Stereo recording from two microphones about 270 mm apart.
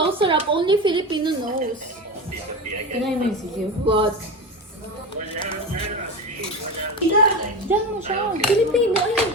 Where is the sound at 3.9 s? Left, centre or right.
Centre.